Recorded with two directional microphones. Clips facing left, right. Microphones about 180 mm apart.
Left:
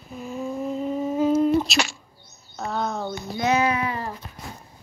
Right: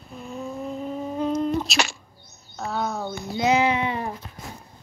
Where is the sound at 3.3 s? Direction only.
20° right (ahead or behind).